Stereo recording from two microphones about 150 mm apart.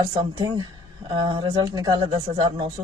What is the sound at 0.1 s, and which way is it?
A man's voice, 30° right (ahead or behind).